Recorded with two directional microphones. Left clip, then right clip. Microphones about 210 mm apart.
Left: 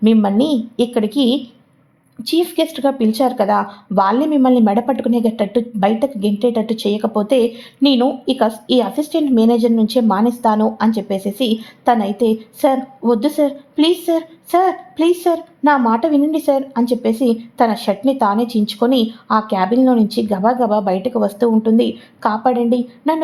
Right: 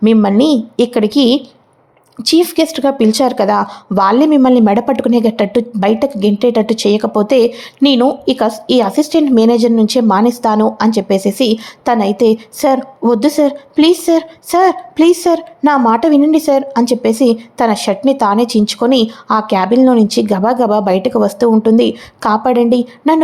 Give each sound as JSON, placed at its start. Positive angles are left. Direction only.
{"t": 0.0, "sound": "speech", "side_deg": -20}